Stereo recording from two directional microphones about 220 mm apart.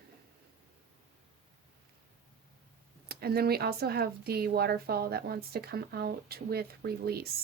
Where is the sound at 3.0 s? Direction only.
45° right (ahead or behind).